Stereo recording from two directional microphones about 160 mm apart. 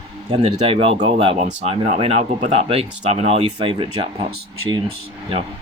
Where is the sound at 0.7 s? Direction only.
35° right (ahead or behind).